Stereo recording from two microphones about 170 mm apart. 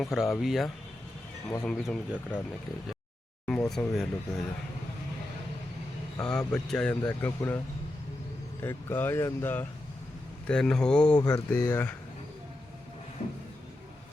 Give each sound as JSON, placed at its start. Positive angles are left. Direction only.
{"t": 0.0, "sound": "speech", "side_deg": 0}
{"t": 3.4, "sound": "speech", "side_deg": 5}
{"t": 6.1, "sound": "speech", "side_deg": 5}
{"t": 8.6, "sound": "speech", "side_deg": 15}
{"t": 11.2, "sound": "speech", "side_deg": 20}